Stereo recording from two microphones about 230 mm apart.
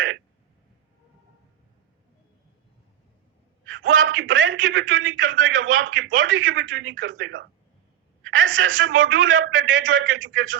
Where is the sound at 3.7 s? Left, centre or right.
Right.